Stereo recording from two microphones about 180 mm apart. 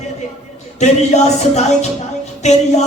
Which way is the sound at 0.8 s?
40° left (ahead or behind).